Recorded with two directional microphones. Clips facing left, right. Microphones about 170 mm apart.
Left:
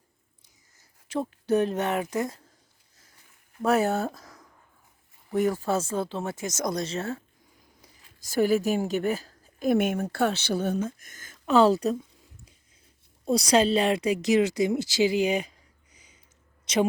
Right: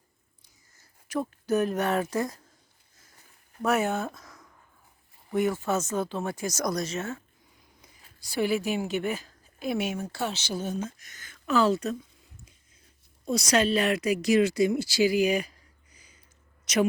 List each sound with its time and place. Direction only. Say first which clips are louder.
0.4 s a woman's voice: right 1 dB; 25° left (ahead or behind)
3.6 s speech: left 3 dB; 30° left (ahead or behind)
7.8 s speech: even; 45° left (ahead or behind)
11.4 s speech: left 4 dB; 30° left (ahead or behind)
13.2 s speech: left 3 dB; 30° left (ahead or behind)